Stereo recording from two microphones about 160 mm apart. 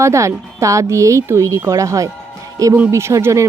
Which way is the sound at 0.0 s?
20° right (ahead or behind).